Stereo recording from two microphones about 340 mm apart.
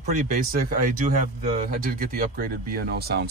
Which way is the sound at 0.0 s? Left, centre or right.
Right.